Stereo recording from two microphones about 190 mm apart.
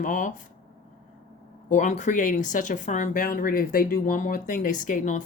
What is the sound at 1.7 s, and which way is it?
Speech, 40° left (ahead or behind).